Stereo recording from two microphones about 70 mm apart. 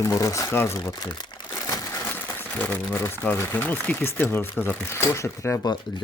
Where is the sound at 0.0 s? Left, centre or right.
Left.